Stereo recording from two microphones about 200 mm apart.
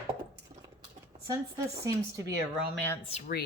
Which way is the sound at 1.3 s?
15° right (ahead or behind).